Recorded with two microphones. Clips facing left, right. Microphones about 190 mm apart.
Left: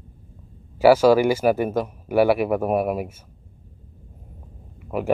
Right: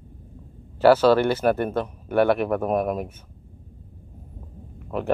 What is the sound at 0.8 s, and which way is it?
Speech, 10° left (ahead or behind).